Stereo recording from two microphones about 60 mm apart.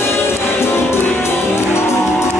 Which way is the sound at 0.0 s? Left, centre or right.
Left.